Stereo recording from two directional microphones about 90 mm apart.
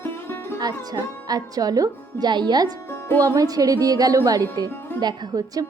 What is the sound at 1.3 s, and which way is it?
A woman's voice, 45° right (ahead or behind).